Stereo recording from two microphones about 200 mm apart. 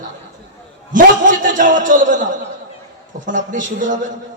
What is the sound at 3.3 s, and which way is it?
Speech, 40° right (ahead or behind).